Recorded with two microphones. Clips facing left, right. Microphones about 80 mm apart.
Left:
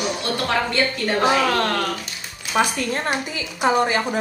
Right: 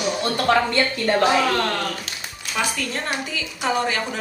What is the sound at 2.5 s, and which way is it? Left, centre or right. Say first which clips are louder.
A woman's voice: left 5 dB; left.